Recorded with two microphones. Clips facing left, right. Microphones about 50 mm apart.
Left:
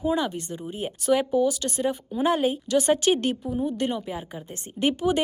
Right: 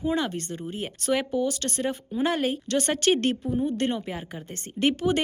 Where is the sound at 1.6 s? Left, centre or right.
Right.